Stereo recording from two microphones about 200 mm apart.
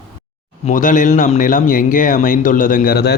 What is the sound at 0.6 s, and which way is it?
A man's voice, 40° left (ahead or behind).